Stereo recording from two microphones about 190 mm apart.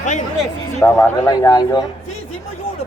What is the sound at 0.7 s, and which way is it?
Speech, 10° left (ahead or behind).